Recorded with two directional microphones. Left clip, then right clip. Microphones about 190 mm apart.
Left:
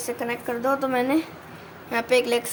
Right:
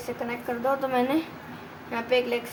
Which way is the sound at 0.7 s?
20° left (ahead or behind).